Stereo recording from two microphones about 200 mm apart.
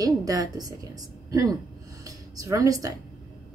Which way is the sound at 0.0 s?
20° right (ahead or behind).